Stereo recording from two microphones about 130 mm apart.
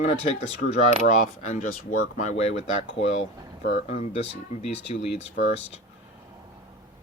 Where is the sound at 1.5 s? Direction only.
70° left (ahead or behind).